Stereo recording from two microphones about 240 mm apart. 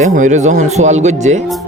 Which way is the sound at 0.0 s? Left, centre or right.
Right.